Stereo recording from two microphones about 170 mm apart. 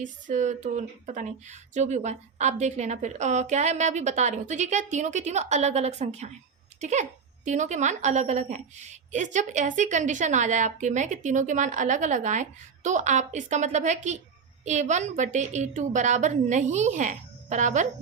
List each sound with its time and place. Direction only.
0.0 s a woman's voice: 45° right (ahead or behind)